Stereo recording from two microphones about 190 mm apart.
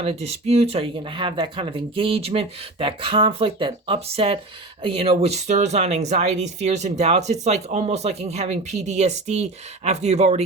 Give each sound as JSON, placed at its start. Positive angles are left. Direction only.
{"t": 0.0, "sound": "speech", "side_deg": -30}